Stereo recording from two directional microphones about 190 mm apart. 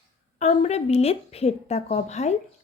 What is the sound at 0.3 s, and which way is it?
A woman's voice, 35° left (ahead or behind).